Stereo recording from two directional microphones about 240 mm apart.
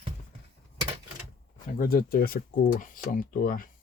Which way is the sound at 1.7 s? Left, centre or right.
Left.